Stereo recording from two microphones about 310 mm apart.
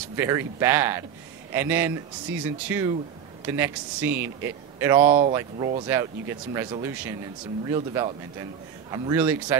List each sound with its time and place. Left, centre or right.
0.1 s a man's voice: centre